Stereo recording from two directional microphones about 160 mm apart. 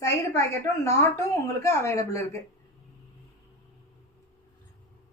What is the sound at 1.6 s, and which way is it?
Speech, 20° left (ahead or behind).